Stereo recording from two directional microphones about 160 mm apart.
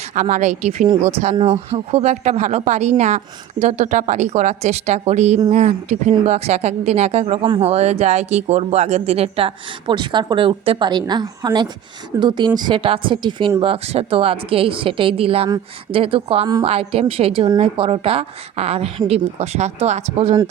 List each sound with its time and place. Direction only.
0.1 s a woman's voice: 50° right (ahead or behind)